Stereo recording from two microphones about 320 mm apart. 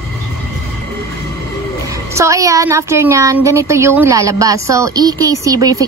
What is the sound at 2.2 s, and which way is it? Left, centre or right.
Speech, centre.